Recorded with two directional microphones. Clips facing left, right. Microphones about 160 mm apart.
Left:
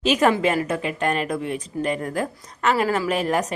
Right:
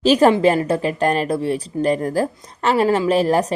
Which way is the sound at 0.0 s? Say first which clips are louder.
Right 6 dB; 35° right (ahead or behind).